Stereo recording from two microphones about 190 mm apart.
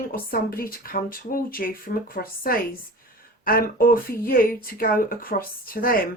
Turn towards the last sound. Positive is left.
turn(degrees=50)  # may be behind; listen again after turning